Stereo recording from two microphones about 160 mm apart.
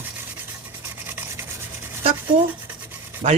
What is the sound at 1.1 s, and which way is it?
Rub, 15° right (ahead or behind).